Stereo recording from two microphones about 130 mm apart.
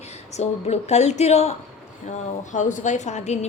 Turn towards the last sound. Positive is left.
turn(degrees=60)  # may be behind; listen again after turning